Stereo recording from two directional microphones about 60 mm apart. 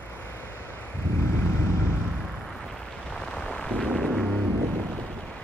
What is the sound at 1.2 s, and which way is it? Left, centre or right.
Vehicle, left.